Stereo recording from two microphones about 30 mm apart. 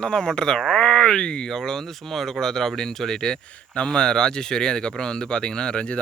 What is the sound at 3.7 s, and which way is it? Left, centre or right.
Speech, left.